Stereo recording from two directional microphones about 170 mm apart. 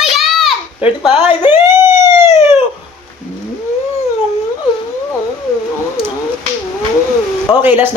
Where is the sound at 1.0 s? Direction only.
5° right (ahead or behind).